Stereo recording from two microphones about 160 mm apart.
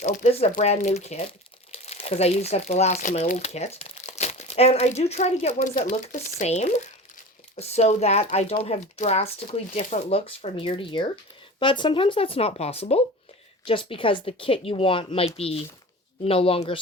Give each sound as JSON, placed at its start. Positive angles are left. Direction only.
{"t": 0.0, "sound": "speech", "side_deg": 45}
{"t": 6.5, "sound": "speech", "side_deg": 45}